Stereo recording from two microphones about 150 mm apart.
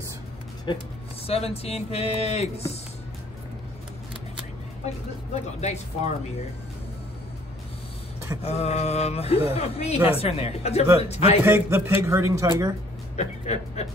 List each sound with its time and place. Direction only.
0.7 s speech: 30° left (ahead or behind)
5.3 s speech: 45° left (ahead or behind)
8.4 s speech: 45° left (ahead or behind)
11.4 s speech: 15° right (ahead or behind)
13.1 s speech: 50° left (ahead or behind)